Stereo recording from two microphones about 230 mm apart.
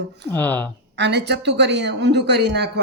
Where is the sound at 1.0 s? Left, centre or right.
Right.